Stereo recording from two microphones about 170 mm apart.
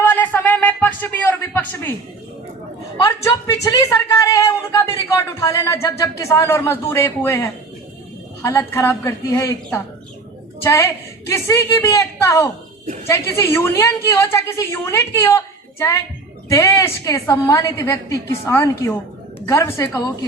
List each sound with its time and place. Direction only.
0.0 s a sound: 10° left (ahead or behind)
3.4 s a man's voice: 20° left (ahead or behind)
10.6 s a woman's voice: 15° left (ahead or behind)